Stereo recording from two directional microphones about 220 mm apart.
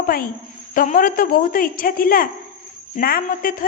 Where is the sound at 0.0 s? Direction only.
40° left (ahead or behind).